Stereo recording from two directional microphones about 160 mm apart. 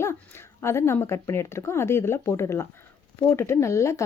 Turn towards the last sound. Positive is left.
turn(degrees=20)  # may be behind; listen again after turning